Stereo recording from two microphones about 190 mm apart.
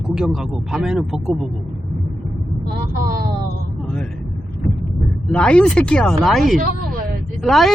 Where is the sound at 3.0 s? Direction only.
50° right (ahead or behind).